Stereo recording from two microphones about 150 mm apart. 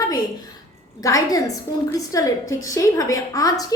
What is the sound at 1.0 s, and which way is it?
A woman's voice, 20° left (ahead or behind).